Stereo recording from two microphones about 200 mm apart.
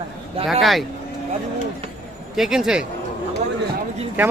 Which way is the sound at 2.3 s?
5° right (ahead or behind).